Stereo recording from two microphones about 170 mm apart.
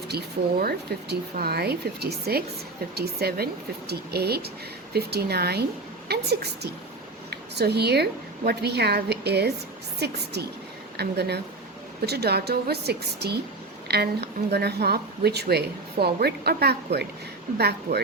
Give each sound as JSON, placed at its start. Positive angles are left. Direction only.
{"t": 0.1, "sound": "a woman's voice", "side_deg": -70}